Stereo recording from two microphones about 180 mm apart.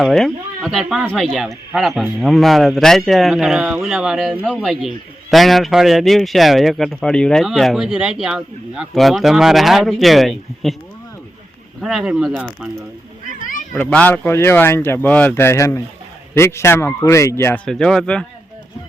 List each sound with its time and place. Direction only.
0.0 s speech: centre (ahead or behind)
11.8 s speech: centre (ahead or behind)
13.4 s cat: 50° left (ahead or behind)
13.7 s speech: 10° left (ahead or behind)
17.7 s speech: 5° left (ahead or behind)